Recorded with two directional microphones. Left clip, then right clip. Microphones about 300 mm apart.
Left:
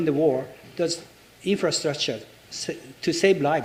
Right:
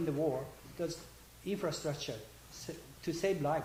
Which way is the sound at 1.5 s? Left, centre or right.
Left.